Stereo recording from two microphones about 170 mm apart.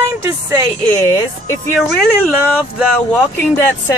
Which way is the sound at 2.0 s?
5° left (ahead or behind).